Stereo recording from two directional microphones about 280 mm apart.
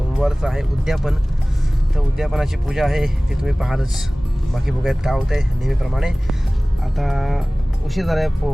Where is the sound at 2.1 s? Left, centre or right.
Centre.